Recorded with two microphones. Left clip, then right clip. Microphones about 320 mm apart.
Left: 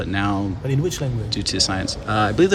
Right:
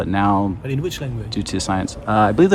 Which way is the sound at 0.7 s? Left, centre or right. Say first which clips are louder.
Left 1 dB; centre.